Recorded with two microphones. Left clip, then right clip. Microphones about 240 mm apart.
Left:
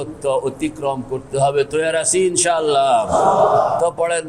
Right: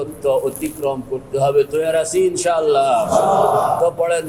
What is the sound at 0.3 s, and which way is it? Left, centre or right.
Speech, left.